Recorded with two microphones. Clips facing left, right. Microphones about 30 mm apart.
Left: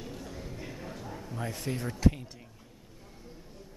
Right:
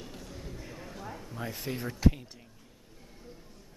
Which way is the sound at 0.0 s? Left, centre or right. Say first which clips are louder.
Left 3 dB; centre.